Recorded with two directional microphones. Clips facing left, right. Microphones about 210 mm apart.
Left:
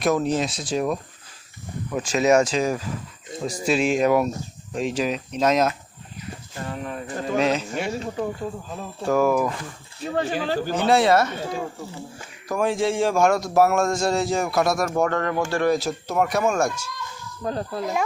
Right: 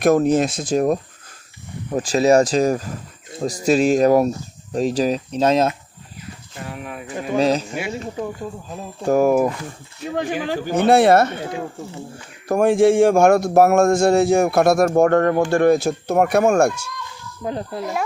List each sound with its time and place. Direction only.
0.0 s speech: 50° right (ahead or behind); by 5.7 s 30° right (ahead or behind)
6.7 s speech: 10° right (ahead or behind)
7.3 s speech: 35° right (ahead or behind)
7.7 s speech: 10° right (ahead or behind)
9.0 s speech: 45° right (ahead or behind)
10.2 s speech: 15° right (ahead or behind)
10.8 s speech: 55° right (ahead or behind)
12.5 s speech: 55° right (ahead or behind)
17.4 s speech: 20° right (ahead or behind)